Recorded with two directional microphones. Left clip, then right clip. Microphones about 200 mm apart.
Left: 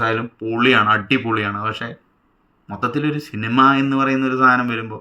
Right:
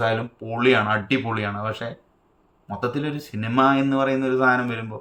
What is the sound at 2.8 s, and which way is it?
Speech, 15° right (ahead or behind).